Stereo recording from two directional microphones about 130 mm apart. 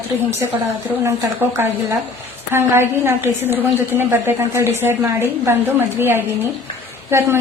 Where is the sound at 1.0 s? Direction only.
20° right (ahead or behind).